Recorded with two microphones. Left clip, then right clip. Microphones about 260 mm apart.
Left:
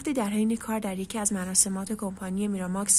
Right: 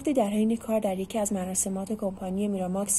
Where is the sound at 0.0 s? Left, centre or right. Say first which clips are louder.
Right 3 dB; left.